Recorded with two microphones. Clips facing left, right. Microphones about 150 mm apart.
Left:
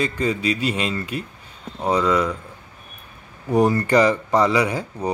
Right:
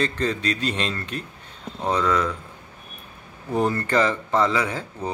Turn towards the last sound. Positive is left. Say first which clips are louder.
# left 4 dB
turn(degrees=15)  # may be behind; listen again after turning